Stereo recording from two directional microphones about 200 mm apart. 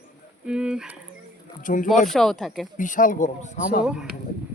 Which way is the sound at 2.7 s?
40° left (ahead or behind).